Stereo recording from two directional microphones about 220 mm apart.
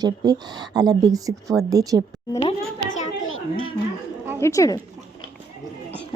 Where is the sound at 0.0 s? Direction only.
20° right (ahead or behind).